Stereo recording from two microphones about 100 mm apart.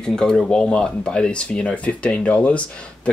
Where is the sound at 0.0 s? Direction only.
5° left (ahead or behind).